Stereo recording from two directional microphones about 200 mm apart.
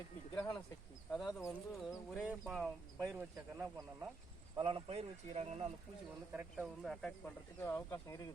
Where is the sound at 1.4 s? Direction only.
15° left (ahead or behind).